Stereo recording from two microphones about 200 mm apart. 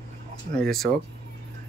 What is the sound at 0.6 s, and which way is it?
Speech, centre (ahead or behind).